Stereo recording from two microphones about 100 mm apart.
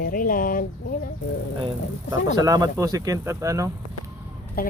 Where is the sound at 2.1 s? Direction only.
35° right (ahead or behind).